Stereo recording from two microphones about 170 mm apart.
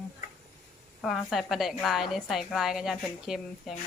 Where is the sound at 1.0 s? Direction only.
Centre (ahead or behind).